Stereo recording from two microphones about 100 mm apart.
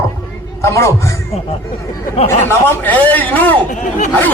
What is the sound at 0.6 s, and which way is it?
Speech, 30° left (ahead or behind).